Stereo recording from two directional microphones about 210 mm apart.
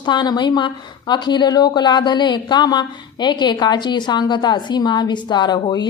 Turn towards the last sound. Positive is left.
turn(degrees=20)  # may be behind; listen again after turning